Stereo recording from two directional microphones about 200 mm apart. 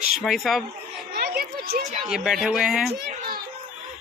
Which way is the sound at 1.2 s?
50° right (ahead or behind).